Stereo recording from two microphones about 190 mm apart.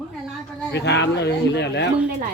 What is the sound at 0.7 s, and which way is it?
Speech, 65° left (ahead or behind).